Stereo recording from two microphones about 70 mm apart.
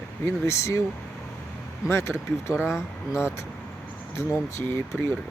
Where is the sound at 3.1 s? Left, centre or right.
Left.